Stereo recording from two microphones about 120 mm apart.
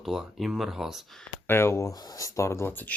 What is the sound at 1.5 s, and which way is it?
Speech, 20° left (ahead or behind).